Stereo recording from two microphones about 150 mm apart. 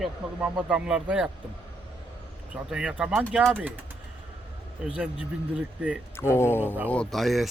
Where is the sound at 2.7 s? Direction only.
5° right (ahead or behind).